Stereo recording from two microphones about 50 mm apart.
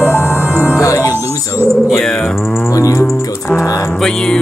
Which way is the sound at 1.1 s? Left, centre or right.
Right.